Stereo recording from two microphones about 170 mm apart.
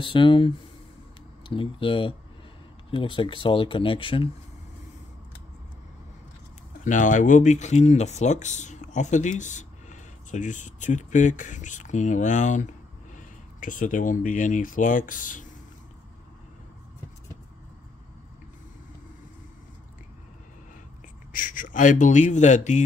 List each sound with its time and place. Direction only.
0.0 s speech: 30° left (ahead or behind)
1.5 s speech: 30° left (ahead or behind)
6.8 s speech: 50° left (ahead or behind)
21.3 s speech: 50° left (ahead or behind)